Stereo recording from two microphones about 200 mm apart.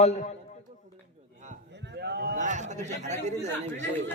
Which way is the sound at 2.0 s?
55° right (ahead or behind).